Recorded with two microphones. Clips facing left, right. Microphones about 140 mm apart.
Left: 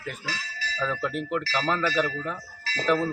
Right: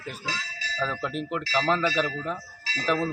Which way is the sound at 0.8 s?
20° right (ahead or behind).